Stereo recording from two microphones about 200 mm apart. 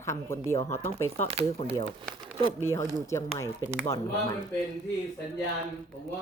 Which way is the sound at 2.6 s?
15° left (ahead or behind).